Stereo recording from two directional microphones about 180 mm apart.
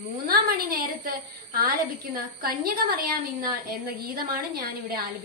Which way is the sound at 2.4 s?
55° right (ahead or behind).